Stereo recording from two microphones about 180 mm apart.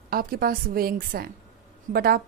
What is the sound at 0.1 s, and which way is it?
A woman's voice, 55° right (ahead or behind).